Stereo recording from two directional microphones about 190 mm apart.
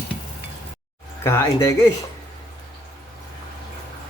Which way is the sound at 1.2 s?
15° left (ahead or behind).